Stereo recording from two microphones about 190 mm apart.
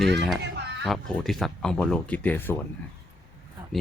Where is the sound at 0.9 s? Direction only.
Centre (ahead or behind).